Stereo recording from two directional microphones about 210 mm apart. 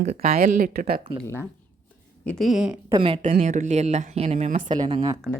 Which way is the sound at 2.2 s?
5° left (ahead or behind).